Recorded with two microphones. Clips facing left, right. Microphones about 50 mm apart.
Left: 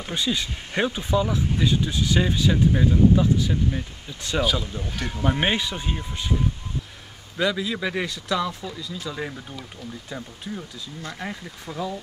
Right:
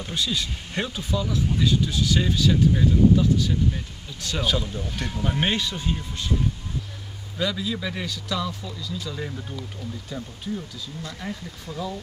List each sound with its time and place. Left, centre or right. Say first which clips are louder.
0.0 s speech: left 1 dB; left
4.4 s speech: left 2 dB; centre
5.2 s speech: left 2 dB; centre
7.3 s speech: left 3 dB; centre